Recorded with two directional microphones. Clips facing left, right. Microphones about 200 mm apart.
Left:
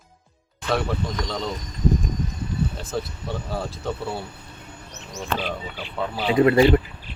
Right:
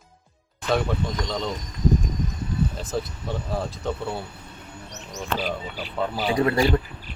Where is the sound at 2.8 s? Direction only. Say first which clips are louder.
Even; centre (ahead or behind).